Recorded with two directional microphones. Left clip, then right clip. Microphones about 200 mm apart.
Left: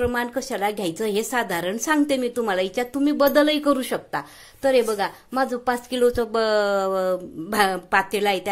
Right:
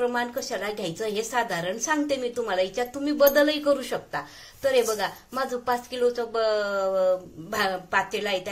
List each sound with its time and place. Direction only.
0.0 s a woman's voice: 45° left (ahead or behind)